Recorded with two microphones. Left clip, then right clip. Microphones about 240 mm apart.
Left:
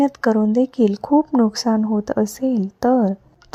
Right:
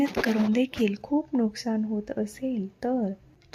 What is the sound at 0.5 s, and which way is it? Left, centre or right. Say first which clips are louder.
A woman's voice: left 8 dB; left.